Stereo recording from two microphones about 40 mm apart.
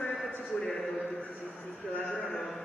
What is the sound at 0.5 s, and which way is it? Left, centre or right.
Speech, left.